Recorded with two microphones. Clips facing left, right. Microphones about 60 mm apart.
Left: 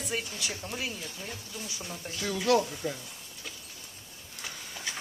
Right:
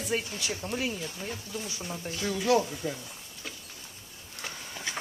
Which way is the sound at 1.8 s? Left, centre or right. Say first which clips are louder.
Right 1 dB; centre.